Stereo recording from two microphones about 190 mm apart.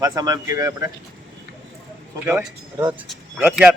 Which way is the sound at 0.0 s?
20° right (ahead or behind).